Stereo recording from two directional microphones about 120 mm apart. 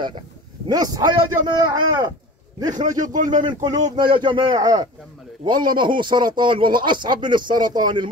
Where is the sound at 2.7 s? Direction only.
90° right.